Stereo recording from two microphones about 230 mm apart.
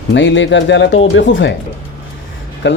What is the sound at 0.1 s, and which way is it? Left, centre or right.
Speech, left.